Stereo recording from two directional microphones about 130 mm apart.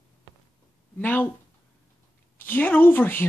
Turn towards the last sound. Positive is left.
turn(degrees=15)  # may be behind; listen again after turning